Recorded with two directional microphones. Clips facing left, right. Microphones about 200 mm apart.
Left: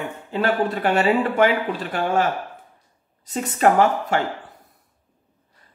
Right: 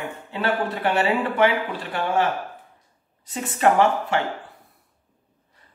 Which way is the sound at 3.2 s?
40° left (ahead or behind).